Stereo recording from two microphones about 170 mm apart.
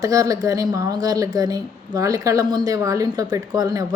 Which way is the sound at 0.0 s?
20° right (ahead or behind).